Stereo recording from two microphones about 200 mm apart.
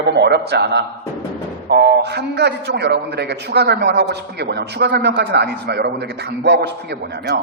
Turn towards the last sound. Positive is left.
turn(degrees=-55)  # may be behind; listen again after turning